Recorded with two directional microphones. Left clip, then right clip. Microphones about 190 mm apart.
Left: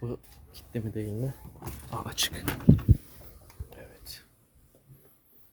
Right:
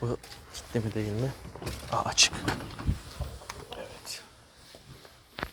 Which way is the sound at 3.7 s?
25° left (ahead or behind).